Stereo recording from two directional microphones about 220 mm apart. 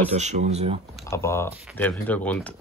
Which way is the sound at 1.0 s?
15° left (ahead or behind).